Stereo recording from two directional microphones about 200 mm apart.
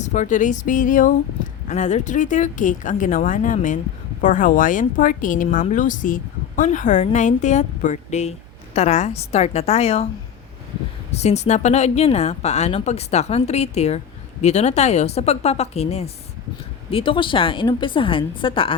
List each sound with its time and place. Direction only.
0.0 s speech: 35° left (ahead or behind)
11.1 s a woman's voice: 35° left (ahead or behind)